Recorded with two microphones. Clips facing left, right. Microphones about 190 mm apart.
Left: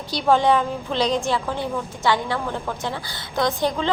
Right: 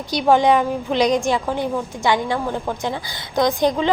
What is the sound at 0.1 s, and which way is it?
A woman's voice, 15° right (ahead or behind).